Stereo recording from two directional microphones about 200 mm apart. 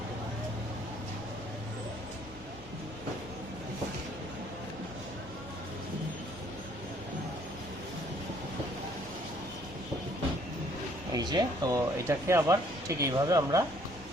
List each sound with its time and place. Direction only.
11.1 s speech: 20° right (ahead or behind)